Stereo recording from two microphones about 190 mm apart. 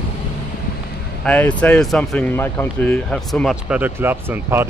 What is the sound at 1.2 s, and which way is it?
Speech, 5° left (ahead or behind).